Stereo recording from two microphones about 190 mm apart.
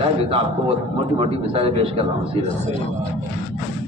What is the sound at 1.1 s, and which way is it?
A man's voice, 30° right (ahead or behind).